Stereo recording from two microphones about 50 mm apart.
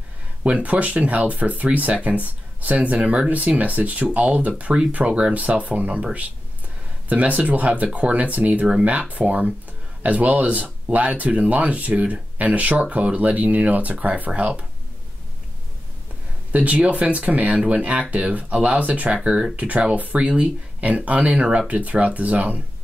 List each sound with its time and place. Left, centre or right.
0.4 s speech: right
7.1 s speech: right
16.5 s speech: right